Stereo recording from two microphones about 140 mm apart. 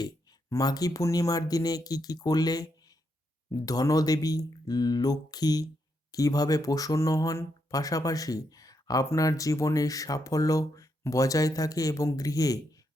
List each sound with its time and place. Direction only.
0.5 s speech: 25° left (ahead or behind)